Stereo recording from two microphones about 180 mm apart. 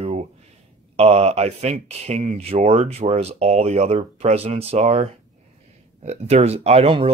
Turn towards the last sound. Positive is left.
turn(degrees=-30)  # may be behind; listen again after turning